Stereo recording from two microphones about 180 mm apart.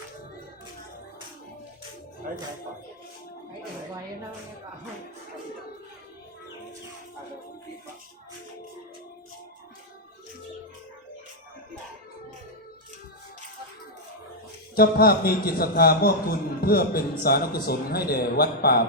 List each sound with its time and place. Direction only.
14.8 s a man's voice: 55° left (ahead or behind)